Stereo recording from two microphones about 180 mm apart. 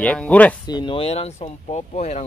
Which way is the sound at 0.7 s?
25° left (ahead or behind).